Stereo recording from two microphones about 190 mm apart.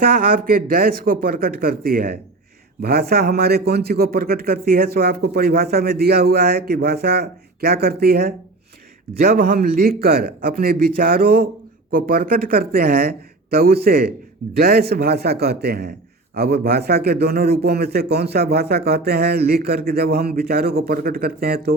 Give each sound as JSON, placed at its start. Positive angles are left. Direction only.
{"t": 0.0, "sound": "a man's voice", "side_deg": -50}